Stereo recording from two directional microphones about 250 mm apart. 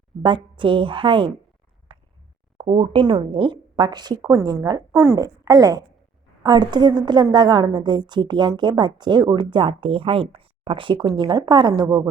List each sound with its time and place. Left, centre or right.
0.2 s a woman's voice: centre
1.9 s a sound: centre
2.6 s a woman's voice: right